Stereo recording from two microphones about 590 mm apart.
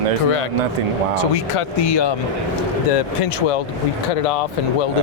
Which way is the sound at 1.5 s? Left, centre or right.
Left.